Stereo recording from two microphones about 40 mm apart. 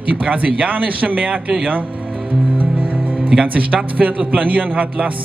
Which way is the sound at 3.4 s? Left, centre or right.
Right.